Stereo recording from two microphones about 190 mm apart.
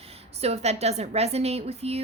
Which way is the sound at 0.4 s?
35° right (ahead or behind).